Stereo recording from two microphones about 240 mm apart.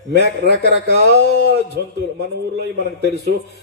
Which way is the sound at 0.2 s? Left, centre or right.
Right.